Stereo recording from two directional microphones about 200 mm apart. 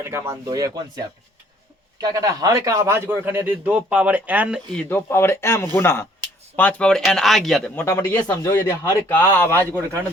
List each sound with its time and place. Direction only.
0.0 s a man's voice: 15° right (ahead or behind)
4.8 s a man's voice: 10° left (ahead or behind)
7.9 s a man's voice: 15° left (ahead or behind)